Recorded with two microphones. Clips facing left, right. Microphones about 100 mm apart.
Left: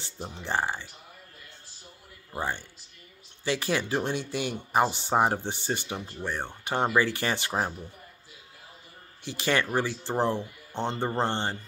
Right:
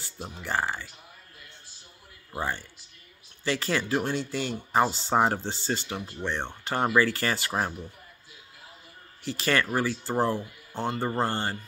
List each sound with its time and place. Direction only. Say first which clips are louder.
0.4 s speech: even; 20° left (ahead or behind)
2.3 s speech: even; 15° left (ahead or behind)
9.2 s speech: right 1 dB; 20° left (ahead or behind)